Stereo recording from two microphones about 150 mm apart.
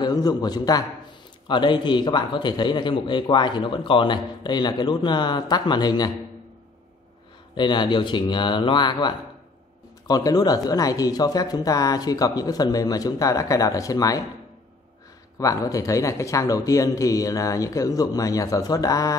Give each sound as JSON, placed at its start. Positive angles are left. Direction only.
{"t": 0.0, "sound": "a man's voice", "side_deg": 25}
{"t": 7.5, "sound": "a man's voice", "side_deg": 30}
{"t": 15.3, "sound": "speech", "side_deg": 20}